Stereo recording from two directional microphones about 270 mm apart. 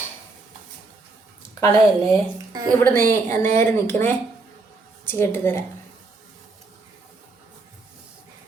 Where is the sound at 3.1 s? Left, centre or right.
Centre.